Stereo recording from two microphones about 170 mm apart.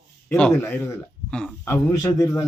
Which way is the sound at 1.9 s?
20° left (ahead or behind).